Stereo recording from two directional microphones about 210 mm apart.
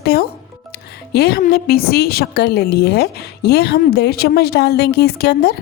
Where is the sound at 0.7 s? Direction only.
50° left (ahead or behind).